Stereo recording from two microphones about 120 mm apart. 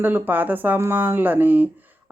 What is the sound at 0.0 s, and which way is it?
Speech, 15° right (ahead or behind).